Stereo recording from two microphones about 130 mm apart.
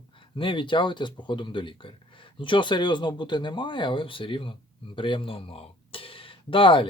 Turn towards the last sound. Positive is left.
turn(degrees=40)  # may be behind; listen again after turning